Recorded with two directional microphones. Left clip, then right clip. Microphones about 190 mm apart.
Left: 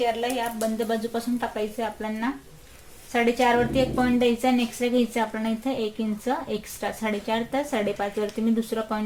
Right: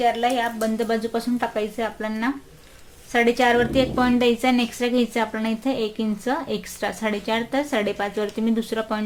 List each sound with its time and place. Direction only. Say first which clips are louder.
0.0 s a woman's voice: right 5 dB; 30° right (ahead or behind)